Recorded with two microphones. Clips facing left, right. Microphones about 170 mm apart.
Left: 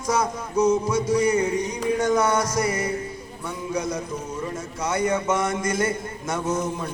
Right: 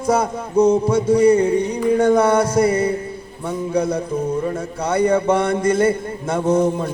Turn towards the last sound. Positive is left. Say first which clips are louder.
# right 8 dB
turn(degrees=-30)  # may be behind; listen again after turning